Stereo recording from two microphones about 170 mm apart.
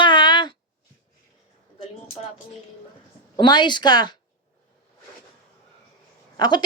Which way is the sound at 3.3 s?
25° left (ahead or behind).